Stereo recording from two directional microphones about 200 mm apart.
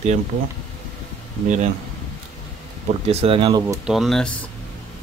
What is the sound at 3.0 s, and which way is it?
Speech, 30° right (ahead or behind).